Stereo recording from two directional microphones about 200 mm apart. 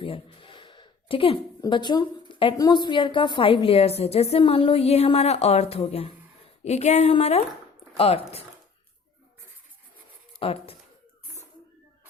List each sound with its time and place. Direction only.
0.0 s a sound: 25° left (ahead or behind)
1.6 s a woman's voice: 20° left (ahead or behind)
10.4 s a woman's voice: 30° left (ahead or behind)